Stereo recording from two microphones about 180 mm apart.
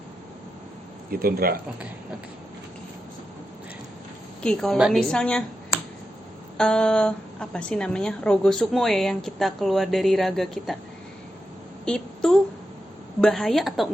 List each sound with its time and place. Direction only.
1.1 s speech: 55° right (ahead or behind)
4.4 s a woman's voice: 5° left (ahead or behind)
6.6 s a woman's voice: 5° left (ahead or behind)
11.9 s a woman's voice: 5° left (ahead or behind)